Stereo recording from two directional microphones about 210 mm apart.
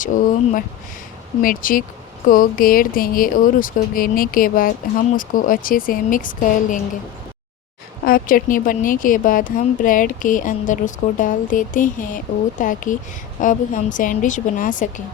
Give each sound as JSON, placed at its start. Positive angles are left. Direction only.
{"t": 1.4, "sound": "speech", "side_deg": 40}
{"t": 8.0, "sound": "speech", "side_deg": 45}